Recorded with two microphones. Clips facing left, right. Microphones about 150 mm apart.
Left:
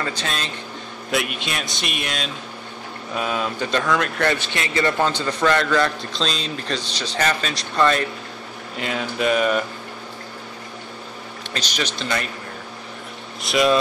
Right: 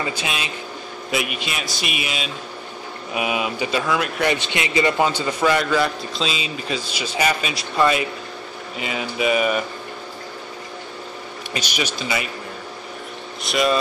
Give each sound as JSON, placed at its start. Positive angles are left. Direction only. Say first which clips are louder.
{"t": 0.0, "sound": "a man's voice", "louder": "right 1 dB", "side_deg": -10}
{"t": 4.3, "sound": "a man's voice", "louder": "right 1 dB", "side_deg": -20}
{"t": 11.5, "sound": "a man's voice", "louder": "right 1 dB", "side_deg": -10}
{"t": 13.4, "sound": "a man's voice", "louder": "left 2 dB", "side_deg": 0}